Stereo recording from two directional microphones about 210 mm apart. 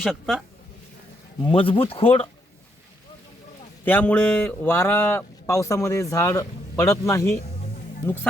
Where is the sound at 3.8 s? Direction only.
10° left (ahead or behind).